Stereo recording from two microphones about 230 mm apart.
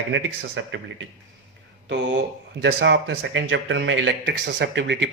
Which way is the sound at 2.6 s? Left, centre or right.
Right.